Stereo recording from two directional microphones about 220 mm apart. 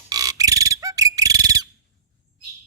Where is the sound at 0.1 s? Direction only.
15° right (ahead or behind).